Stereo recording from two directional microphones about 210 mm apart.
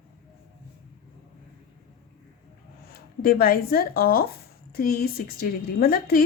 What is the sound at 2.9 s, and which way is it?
A woman's voice, 45° left (ahead or behind).